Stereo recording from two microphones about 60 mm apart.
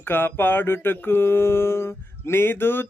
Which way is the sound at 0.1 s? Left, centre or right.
Left.